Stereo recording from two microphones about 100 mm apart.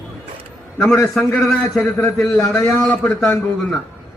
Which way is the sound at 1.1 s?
5° left (ahead or behind).